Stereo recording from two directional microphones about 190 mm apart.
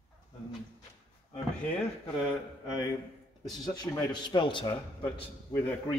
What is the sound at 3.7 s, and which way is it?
Speech, 25° left (ahead or behind).